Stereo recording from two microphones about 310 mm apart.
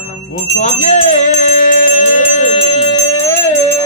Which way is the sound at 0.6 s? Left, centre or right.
Left.